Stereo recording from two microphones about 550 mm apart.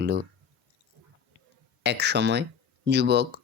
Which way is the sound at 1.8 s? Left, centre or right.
Centre.